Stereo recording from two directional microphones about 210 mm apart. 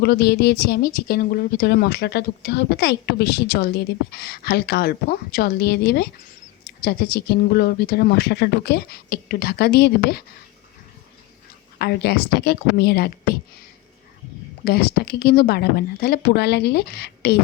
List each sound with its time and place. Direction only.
0.0 s speech: 50° left (ahead or behind)
11.8 s speech: 50° left (ahead or behind)
14.6 s speech: 50° left (ahead or behind)